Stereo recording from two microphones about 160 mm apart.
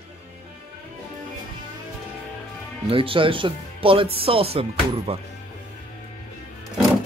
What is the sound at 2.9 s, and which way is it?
Speech, 35° right (ahead or behind).